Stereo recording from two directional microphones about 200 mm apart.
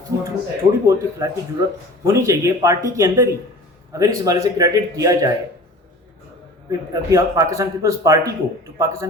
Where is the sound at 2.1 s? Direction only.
15° right (ahead or behind).